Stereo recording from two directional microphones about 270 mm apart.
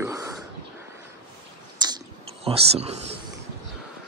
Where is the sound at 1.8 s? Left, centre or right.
Centre.